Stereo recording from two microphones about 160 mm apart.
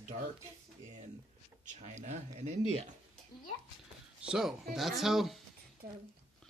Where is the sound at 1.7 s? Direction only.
45° right (ahead or behind).